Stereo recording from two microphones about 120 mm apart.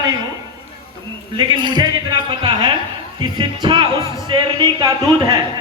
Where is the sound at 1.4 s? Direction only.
40° right (ahead or behind).